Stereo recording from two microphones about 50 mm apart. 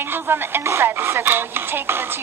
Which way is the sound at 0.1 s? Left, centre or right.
Right.